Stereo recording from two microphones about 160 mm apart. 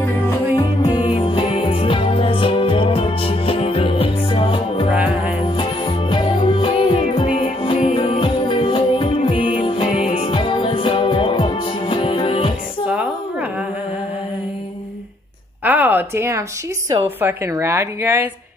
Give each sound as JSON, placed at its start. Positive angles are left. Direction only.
{"t": 0.6, "sound": "music", "side_deg": 25}
{"t": 4.9, "sound": "music", "side_deg": -10}
{"t": 5.6, "sound": "music", "side_deg": 30}
{"t": 15.6, "sound": "a sound", "side_deg": -10}
{"t": 17.2, "sound": "a woman's voice", "side_deg": -15}